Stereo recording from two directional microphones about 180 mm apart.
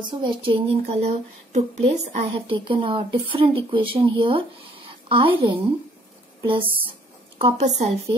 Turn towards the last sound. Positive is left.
turn(degrees=-35)  # may be behind; listen again after turning